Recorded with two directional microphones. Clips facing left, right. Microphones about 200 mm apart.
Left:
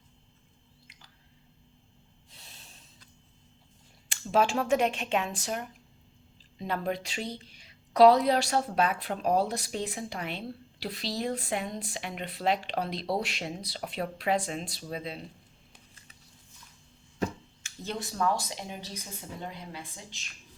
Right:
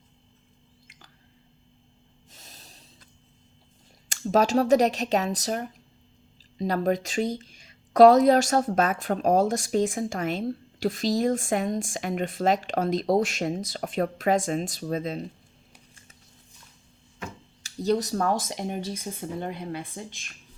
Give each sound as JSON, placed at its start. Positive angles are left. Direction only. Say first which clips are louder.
{"t": 0.9, "sound": "squish", "louder": "right 4 dB", "side_deg": -50}
{"t": 2.3, "sound": "snort", "louder": "right 3 dB", "side_deg": -40}
{"t": 4.1, "sound": "speech", "louder": "right 5 dB", "side_deg": -40}
{"t": 17.6, "sound": "a sound", "louder": "right 13 dB", "side_deg": -40}
{"t": 18.1, "sound": "speech", "louder": "right 4 dB", "side_deg": -50}